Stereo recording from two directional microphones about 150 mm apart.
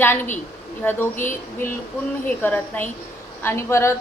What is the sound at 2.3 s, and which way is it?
A woman's voice, 10° left (ahead or behind).